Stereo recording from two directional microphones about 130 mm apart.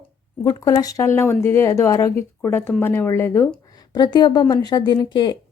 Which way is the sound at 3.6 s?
30° left (ahead or behind).